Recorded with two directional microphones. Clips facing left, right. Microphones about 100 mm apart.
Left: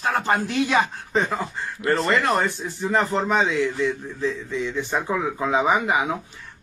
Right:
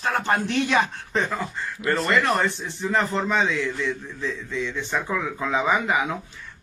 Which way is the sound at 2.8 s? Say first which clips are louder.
Left 2 dB; 15° left (ahead or behind).